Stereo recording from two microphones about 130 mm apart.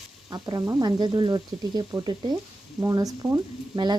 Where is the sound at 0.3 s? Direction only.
35° right (ahead or behind).